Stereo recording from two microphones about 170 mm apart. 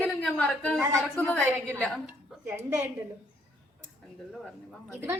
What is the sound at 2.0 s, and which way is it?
Speech, 10° right (ahead or behind).